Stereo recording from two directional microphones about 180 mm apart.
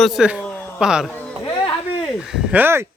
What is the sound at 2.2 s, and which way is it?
Speech, 5° right (ahead or behind).